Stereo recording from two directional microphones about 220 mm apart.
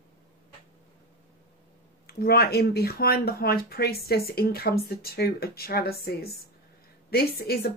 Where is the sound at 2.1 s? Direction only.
45° left (ahead or behind).